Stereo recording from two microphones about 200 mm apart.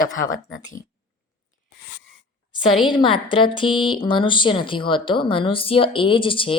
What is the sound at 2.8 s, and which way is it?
Speech, 25° left (ahead or behind).